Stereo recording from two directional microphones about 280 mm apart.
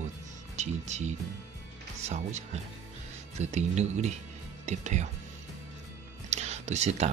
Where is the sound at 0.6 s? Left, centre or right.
Right.